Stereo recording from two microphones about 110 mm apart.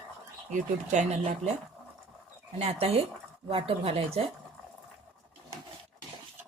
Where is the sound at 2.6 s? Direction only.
65° right (ahead or behind).